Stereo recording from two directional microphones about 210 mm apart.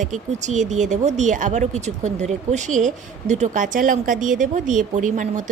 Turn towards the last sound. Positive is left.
turn(degrees=-35)  # may be behind; listen again after turning